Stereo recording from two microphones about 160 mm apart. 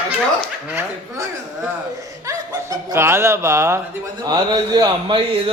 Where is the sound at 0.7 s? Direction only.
15° right (ahead or behind).